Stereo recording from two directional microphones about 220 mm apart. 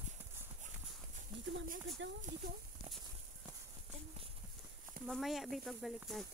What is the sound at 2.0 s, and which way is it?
Speech, 55° right (ahead or behind).